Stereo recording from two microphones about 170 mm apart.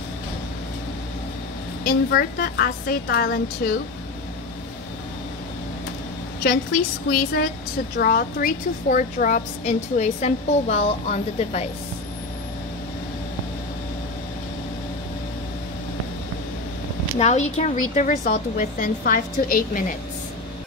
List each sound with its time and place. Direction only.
1.9 s a woman's voice: 65° left (ahead or behind)
6.4 s a woman's voice: 70° left (ahead or behind); by 11.7 s 40° left (ahead or behind)
17.2 s a woman's voice: 40° left (ahead or behind)